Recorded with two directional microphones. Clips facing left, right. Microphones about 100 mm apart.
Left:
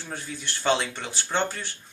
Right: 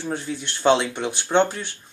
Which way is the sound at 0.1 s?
20° right (ahead or behind).